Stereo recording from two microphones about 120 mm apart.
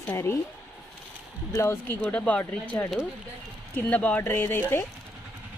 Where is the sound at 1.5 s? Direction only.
20° left (ahead or behind).